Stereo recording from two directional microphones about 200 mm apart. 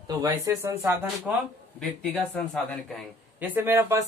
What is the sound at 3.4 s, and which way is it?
Speech, 10° right (ahead or behind).